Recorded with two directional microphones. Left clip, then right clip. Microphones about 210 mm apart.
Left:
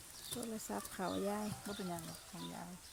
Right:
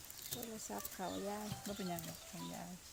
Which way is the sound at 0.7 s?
50° left (ahead or behind).